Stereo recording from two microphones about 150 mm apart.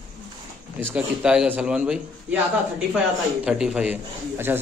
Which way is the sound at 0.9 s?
5° right (ahead or behind).